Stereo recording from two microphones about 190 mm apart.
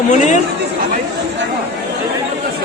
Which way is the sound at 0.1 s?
40° left (ahead or behind).